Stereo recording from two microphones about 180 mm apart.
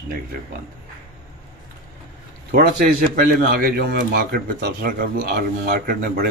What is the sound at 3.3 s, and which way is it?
Speech, 55° right (ahead or behind).